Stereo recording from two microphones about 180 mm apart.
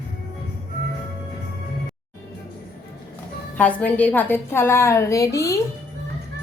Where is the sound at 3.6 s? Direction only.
10° left (ahead or behind).